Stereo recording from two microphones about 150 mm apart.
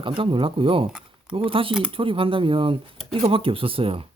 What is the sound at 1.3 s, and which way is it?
Speech, 35° right (ahead or behind).